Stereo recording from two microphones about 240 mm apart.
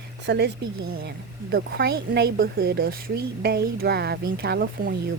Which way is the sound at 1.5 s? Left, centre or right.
Right.